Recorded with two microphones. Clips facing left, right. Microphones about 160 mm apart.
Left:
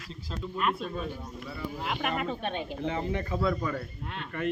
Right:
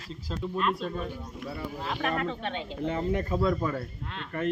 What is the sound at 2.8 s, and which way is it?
Speech, 45° right (ahead or behind).